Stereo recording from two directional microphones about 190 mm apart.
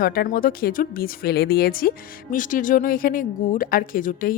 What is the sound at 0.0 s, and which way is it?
Speech, 50° left (ahead or behind).